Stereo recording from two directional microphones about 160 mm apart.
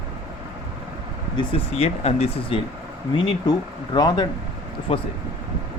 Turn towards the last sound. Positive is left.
turn(degrees=35)  # may be behind; listen again after turning